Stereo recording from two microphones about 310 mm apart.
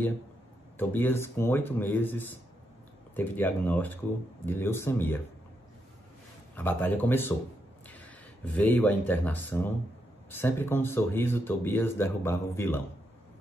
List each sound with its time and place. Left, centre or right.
0.7 s speech: centre
6.5 s speech: centre
8.5 s speech: centre